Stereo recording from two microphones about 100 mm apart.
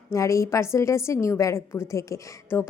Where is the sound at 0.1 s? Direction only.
30° left (ahead or behind).